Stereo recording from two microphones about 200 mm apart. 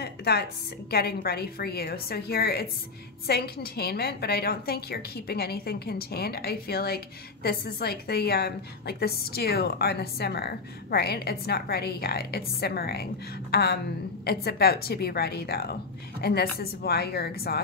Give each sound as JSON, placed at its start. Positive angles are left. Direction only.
{"t": 0.0, "sound": "a woman's voice", "side_deg": 55}